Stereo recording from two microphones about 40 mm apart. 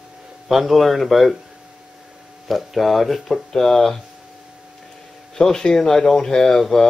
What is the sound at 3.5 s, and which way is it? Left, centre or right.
Speech, centre.